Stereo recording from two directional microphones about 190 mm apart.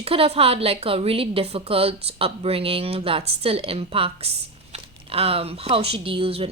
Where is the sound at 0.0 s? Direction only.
30° right (ahead or behind).